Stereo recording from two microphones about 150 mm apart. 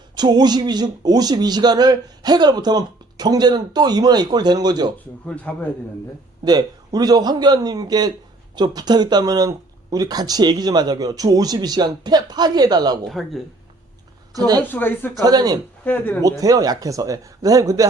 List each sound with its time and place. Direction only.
0.2 s a man's voice: 30° right (ahead or behind)
5.2 s speech: 10° left (ahead or behind)
6.4 s a man's voice: 25° right (ahead or behind)
13.1 s speech: centre (ahead or behind)
14.3 s a man's voice: 25° right (ahead or behind)
14.6 s speech: 15° left (ahead or behind)
15.1 s a man's voice: 25° right (ahead or behind)
15.8 s speech: 10° left (ahead or behind)
16.4 s a man's voice: 25° right (ahead or behind)